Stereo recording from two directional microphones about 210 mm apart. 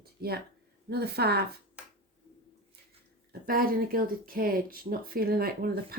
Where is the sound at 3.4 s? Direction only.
45° right (ahead or behind).